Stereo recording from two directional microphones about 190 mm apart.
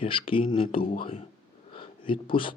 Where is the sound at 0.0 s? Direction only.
30° left (ahead or behind).